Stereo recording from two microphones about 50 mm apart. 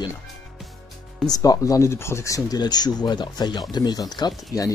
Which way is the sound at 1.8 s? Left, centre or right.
Left.